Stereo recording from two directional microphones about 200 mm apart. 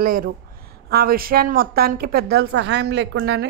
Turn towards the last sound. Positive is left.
turn(degrees=-60)  # may be behind; listen again after turning